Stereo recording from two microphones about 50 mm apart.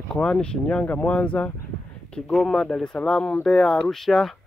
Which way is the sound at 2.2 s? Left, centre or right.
Centre.